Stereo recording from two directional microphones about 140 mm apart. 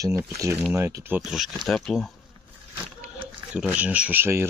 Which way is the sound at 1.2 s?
Centre (ahead or behind).